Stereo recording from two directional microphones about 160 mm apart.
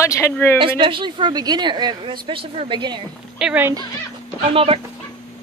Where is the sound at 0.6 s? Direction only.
30° right (ahead or behind).